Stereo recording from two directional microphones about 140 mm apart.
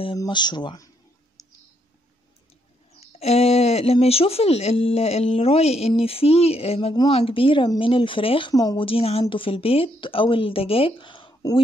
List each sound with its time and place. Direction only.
0.2 s clicking: 30° left (ahead or behind)
3.0 s speech: 50° left (ahead or behind); by 8.8 s 30° left (ahead or behind)
8.8 s speech: 45° left (ahead or behind)